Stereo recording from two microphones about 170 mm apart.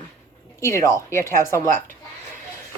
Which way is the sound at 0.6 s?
15° left (ahead or behind).